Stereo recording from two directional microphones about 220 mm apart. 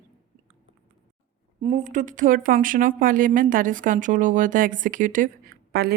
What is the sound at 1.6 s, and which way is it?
A woman's voice, 35° right (ahead or behind).